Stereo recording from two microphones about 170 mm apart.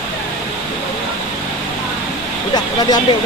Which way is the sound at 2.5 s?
20° left (ahead or behind).